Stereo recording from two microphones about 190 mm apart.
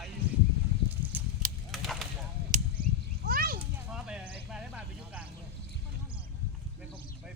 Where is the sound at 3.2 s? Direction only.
50° right (ahead or behind).